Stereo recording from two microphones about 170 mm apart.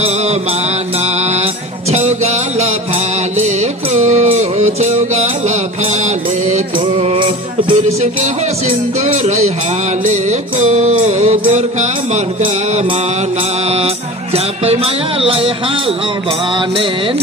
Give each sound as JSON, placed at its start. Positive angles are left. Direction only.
{"t": 0.0, "sound": "music", "side_deg": -40}
{"t": 9.0, "sound": "music", "side_deg": -40}
{"t": 13.7, "sound": "music", "side_deg": -35}